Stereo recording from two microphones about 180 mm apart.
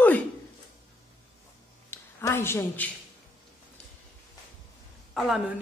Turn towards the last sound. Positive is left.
turn(degrees=0)  # may be behind; listen again after turning